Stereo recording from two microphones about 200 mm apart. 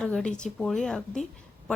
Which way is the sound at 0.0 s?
5° left (ahead or behind).